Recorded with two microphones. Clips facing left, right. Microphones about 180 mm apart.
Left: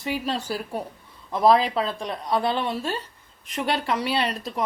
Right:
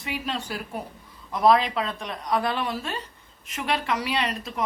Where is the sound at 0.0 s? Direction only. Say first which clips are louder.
Left 4 dB; 35° left (ahead or behind).